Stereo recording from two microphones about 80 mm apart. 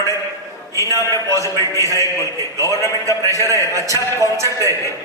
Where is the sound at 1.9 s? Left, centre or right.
Left.